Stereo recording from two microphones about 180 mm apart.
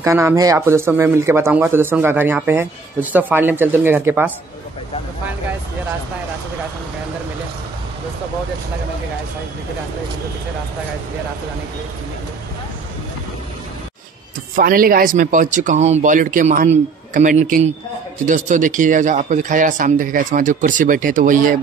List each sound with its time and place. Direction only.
0.0 s speech: 15° right (ahead or behind)
14.5 s speech: 50° right (ahead or behind)